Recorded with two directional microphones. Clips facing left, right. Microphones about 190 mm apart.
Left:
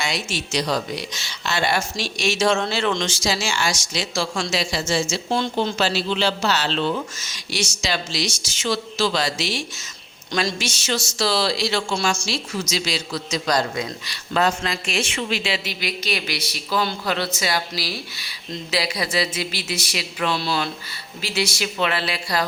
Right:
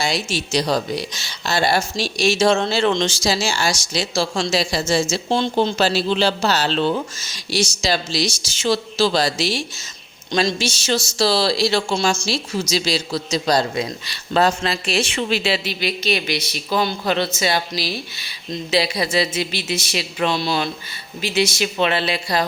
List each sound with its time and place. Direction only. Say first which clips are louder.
0.0 s a man's voice: right 4 dB; 35° right (ahead or behind)